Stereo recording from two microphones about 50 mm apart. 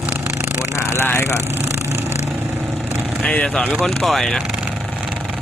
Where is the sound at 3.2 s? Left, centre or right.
Left.